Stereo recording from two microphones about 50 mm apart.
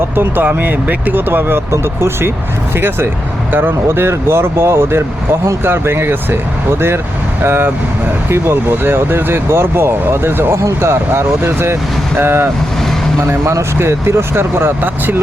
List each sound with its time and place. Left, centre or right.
0.4 s speech: right
3.5 s speech: right
3.8 s speech: right
10.6 s speech: right
13.2 s speech: right
14.8 s speech: right